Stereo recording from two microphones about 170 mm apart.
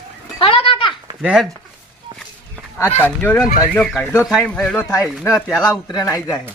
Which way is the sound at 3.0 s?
10° left (ahead or behind).